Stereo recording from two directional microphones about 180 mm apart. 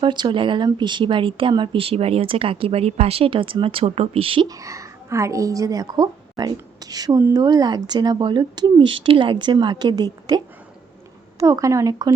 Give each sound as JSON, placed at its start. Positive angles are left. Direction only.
{"t": 0.0, "sound": "a woman's voice", "side_deg": -25}
{"t": 4.6, "sound": "a woman's voice", "side_deg": -15}